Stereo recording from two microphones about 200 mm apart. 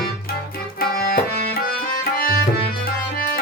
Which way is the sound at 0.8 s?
50° left (ahead or behind).